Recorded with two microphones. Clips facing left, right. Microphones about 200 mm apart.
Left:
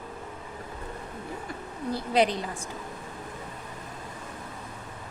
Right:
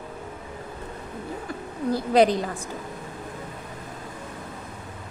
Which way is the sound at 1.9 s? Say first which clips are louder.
Right 6 dB; 40° right (ahead or behind).